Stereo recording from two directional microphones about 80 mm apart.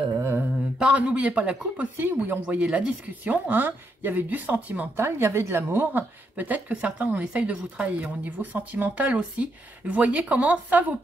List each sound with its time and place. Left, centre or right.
0.2 s mantra: right
0.7 s speech: centre
4.9 s speech: right